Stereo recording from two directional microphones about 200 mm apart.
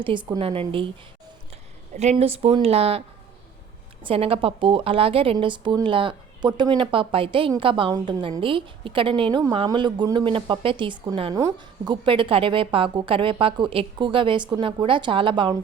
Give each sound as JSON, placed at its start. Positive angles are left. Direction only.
{"t": 0.0, "sound": "a woman's voice", "side_deg": -25}
{"t": 1.9, "sound": "a woman's voice", "side_deg": -35}
{"t": 4.0, "sound": "a woman's voice", "side_deg": -30}